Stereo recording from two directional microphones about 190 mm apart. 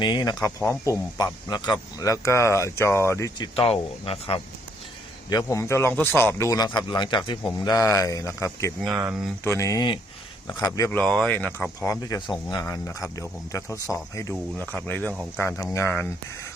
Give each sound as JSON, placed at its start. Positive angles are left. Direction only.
{"t": 0.0, "sound": "speech", "side_deg": 20}
{"t": 5.3, "sound": "speech", "side_deg": 15}
{"t": 8.9, "sound": "speech", "side_deg": -10}
{"t": 9.4, "sound": "speech", "side_deg": 15}
{"t": 11.9, "sound": "speech", "side_deg": 20}